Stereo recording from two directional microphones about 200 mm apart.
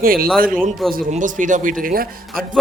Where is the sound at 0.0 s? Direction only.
45° right (ahead or behind).